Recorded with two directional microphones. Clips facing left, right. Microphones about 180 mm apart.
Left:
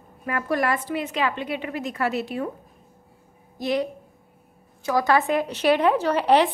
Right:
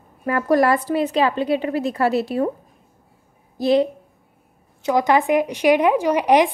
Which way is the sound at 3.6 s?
30° right (ahead or behind).